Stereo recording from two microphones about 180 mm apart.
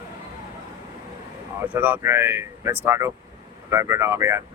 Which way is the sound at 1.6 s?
10° right (ahead or behind).